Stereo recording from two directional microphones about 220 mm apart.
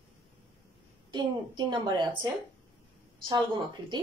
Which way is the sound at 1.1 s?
20° right (ahead or behind).